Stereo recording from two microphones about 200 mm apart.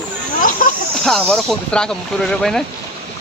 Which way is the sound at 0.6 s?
45° left (ahead or behind).